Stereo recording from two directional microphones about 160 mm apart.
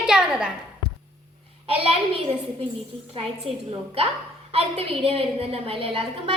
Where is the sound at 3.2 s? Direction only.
35° right (ahead or behind).